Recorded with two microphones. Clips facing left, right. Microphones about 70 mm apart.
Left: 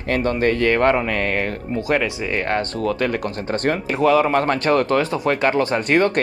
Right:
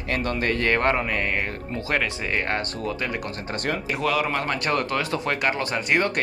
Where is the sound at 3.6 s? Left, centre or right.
Left.